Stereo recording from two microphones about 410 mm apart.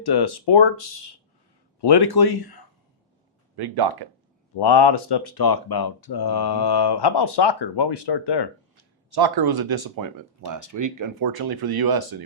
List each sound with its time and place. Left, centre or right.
0.0 s speech: left
1.8 s speech: left
3.5 s speech: right
4.5 s speech: left
8.8 s speech: right